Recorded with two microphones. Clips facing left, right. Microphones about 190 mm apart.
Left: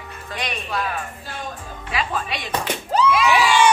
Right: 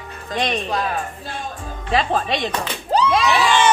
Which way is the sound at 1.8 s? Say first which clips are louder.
Right 6 dB; 35° right (ahead or behind).